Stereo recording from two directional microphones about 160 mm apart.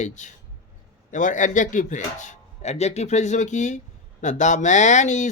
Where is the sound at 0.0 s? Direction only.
50° left (ahead or behind).